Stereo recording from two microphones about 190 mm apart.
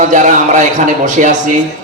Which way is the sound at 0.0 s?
40° right (ahead or behind).